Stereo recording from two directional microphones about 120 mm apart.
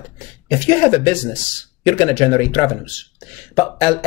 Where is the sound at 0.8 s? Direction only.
45° left (ahead or behind).